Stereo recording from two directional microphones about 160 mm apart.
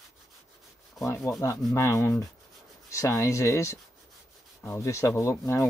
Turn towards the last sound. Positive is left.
turn(degrees=15)  # may be behind; listen again after turning